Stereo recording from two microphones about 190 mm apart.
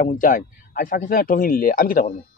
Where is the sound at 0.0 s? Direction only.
45° left (ahead or behind).